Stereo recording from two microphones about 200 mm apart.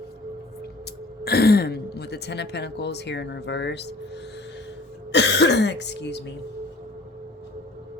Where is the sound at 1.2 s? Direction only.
50° left (ahead or behind).